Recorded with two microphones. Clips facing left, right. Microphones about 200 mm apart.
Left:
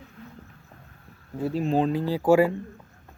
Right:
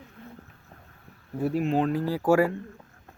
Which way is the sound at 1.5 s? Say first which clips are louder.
Left 2 dB; 30° left (ahead or behind).